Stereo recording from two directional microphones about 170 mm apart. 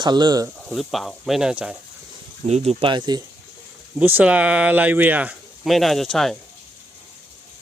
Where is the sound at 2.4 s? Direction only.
40° right (ahead or behind).